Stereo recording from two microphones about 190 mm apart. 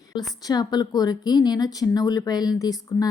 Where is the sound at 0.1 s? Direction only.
20° left (ahead or behind).